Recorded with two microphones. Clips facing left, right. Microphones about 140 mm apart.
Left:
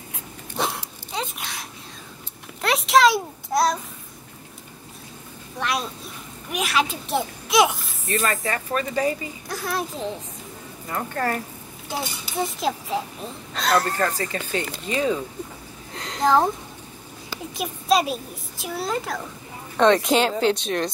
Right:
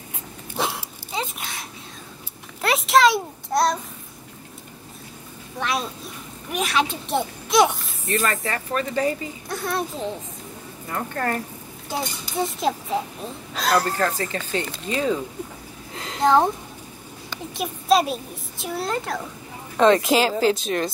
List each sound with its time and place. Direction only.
0.6 s a sound: centre (ahead or behind)
5.6 s a sound: centre (ahead or behind)
6.5 s a child's voice: centre (ahead or behind)
8.1 s speech: 20° left (ahead or behind)
9.5 s speech: centre (ahead or behind)
11.9 s speech: centre (ahead or behind)
14.3 s speech: 15° left (ahead or behind)
15.9 s a woman's voice: centre (ahead or behind)